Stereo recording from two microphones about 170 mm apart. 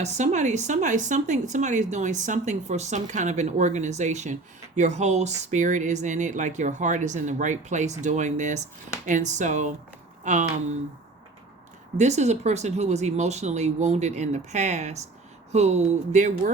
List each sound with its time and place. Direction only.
0.0 s speech: 40° right (ahead or behind)
11.9 s speech: 40° right (ahead or behind)